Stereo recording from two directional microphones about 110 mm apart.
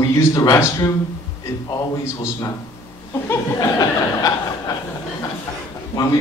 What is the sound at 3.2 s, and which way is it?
Speech, 30° left (ahead or behind).